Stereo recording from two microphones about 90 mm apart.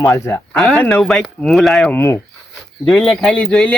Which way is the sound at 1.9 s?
30° left (ahead or behind).